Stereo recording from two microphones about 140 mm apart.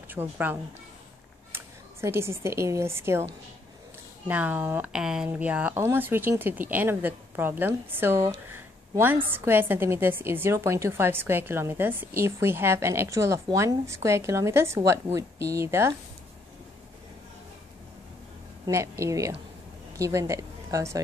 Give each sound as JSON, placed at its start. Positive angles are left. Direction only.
{"t": 0.1, "sound": "speech", "side_deg": -15}
{"t": 4.3, "sound": "a woman's voice", "side_deg": -10}
{"t": 18.7, "sound": "a woman's voice", "side_deg": -20}